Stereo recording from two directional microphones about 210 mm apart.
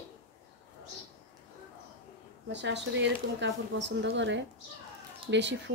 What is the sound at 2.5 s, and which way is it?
Speech, 55° right (ahead or behind).